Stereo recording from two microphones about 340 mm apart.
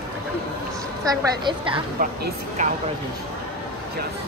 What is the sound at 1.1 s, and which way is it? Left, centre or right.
A woman's voice, centre.